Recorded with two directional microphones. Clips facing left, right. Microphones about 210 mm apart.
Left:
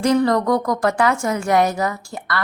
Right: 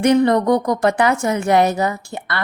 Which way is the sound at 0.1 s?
20° right (ahead or behind).